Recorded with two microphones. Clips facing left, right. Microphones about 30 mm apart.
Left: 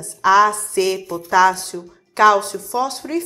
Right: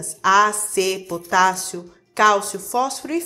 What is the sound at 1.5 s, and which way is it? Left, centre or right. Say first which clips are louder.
A woman's voice: left 1 dB; left.